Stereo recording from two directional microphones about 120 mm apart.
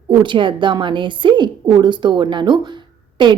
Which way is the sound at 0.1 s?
40° right (ahead or behind).